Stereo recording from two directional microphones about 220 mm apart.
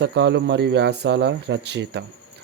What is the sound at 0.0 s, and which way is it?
Speech, 50° right (ahead or behind).